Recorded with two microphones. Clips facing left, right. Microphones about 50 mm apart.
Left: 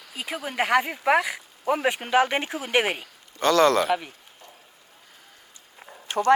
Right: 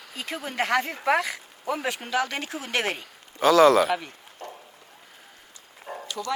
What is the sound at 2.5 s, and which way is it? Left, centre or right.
Speech, centre.